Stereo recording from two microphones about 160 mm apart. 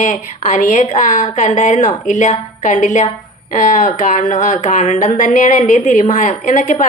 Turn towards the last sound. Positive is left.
turn(degrees=55)  # may be behind; listen again after turning